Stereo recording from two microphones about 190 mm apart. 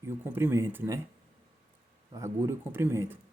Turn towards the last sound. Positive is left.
turn(degrees=-10)  # may be behind; listen again after turning